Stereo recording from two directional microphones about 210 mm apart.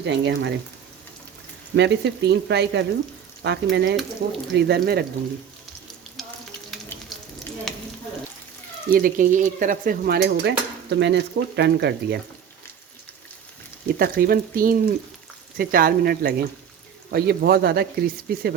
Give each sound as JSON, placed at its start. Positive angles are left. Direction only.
{"t": 0.0, "sound": "speech", "side_deg": -55}
{"t": 1.7, "sound": "stir", "side_deg": -55}
{"t": 3.4, "sound": "speech", "side_deg": -55}
{"t": 4.2, "sound": "stir", "side_deg": -45}
{"t": 8.9, "sound": "stir", "side_deg": -40}
{"t": 13.8, "sound": "stir", "side_deg": -45}